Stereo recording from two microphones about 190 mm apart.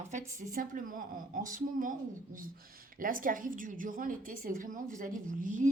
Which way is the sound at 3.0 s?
45° right (ahead or behind).